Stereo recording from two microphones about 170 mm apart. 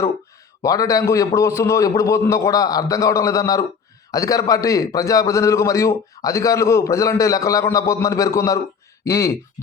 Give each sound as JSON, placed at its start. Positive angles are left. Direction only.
{"t": 0.6, "sound": "a man's voice", "side_deg": 20}